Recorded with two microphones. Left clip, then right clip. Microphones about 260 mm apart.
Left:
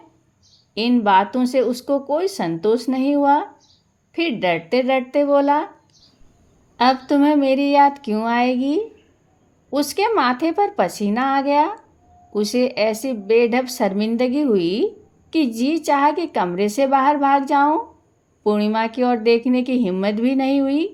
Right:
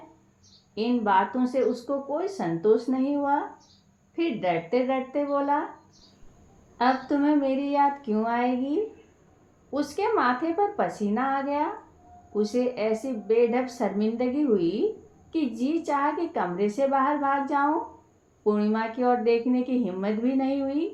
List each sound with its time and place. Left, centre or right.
0.7 s speech: left
6.7 s speech: left